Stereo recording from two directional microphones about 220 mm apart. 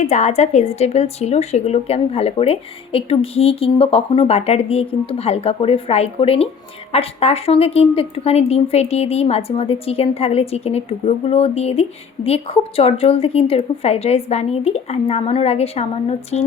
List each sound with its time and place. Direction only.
0.0 s speech: 30° left (ahead or behind)